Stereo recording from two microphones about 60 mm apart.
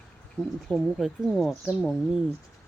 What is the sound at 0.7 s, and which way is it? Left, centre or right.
Speech, centre.